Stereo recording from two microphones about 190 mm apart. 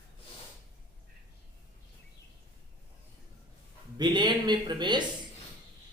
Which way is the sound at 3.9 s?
20° right (ahead or behind).